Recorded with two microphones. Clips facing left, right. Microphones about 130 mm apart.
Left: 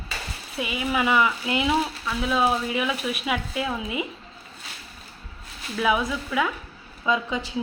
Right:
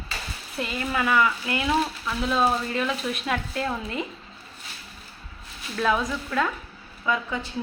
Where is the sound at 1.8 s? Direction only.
5° left (ahead or behind).